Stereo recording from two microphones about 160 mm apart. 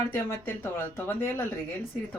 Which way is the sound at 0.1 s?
15° left (ahead or behind).